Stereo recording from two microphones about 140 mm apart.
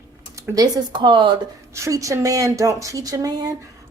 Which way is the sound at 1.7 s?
20° right (ahead or behind).